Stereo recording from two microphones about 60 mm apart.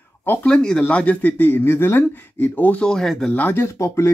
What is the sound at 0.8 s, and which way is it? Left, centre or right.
Speech, left.